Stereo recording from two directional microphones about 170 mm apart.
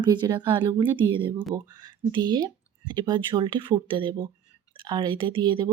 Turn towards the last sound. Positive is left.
turn(degrees=-30)  # may be behind; listen again after turning